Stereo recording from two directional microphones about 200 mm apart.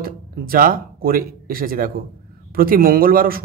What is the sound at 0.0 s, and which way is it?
Speech, 45° right (ahead or behind).